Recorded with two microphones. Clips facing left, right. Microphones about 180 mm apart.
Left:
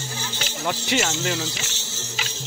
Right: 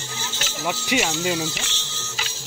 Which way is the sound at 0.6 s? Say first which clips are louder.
Right 1 dB; 10° right (ahead or behind).